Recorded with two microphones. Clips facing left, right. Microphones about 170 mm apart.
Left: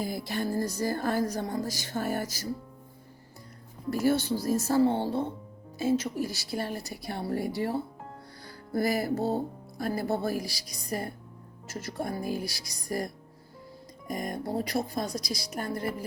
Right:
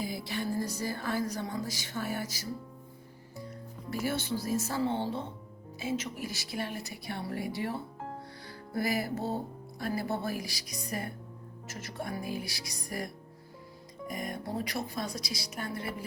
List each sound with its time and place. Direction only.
0.0 s music: 45° left (ahead or behind)
3.8 s a woman's voice: 40° left (ahead or behind)
8.4 s music: 40° left (ahead or behind)
9.7 s a woman's voice: 40° left (ahead or behind)
14.1 s music: 40° left (ahead or behind)